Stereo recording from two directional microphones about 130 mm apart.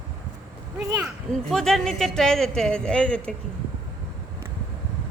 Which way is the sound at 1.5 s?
5° left (ahead or behind).